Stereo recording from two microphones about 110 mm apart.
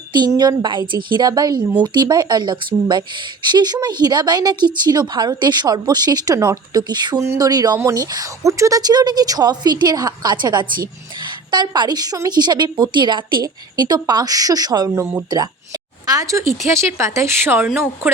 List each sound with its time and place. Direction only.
0.1 s speech: 40° right (ahead or behind)
7.2 s speech: 30° right (ahead or behind)